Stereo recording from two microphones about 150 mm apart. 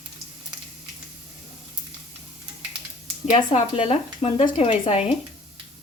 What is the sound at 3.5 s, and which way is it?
Speech, 40° left (ahead or behind).